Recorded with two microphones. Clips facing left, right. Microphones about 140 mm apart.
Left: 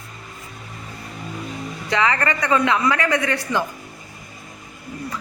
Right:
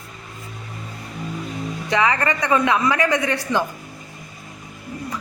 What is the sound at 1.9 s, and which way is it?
A woman's voice, 15° right (ahead or behind).